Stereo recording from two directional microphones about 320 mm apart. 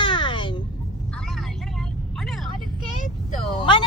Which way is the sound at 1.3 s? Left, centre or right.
Centre.